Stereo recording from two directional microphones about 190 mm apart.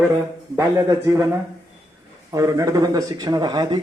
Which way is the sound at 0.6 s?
15° right (ahead or behind).